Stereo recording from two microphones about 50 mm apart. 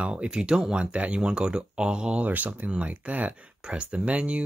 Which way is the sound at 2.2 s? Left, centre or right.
Right.